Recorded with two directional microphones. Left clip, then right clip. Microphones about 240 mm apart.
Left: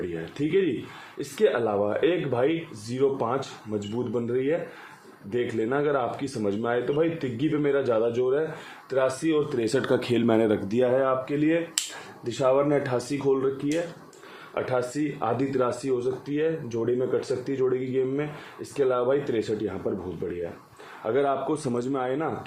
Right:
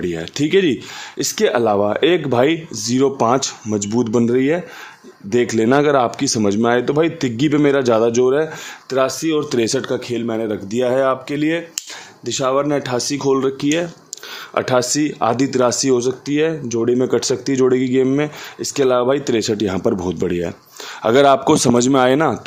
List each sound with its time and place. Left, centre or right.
0.1 s speech: right
9.6 s speech: right
10.8 s speech: right
12.2 s speech: right
21.0 s speech: right